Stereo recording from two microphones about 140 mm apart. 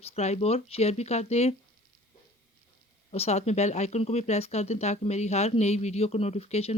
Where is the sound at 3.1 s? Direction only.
50° left (ahead or behind).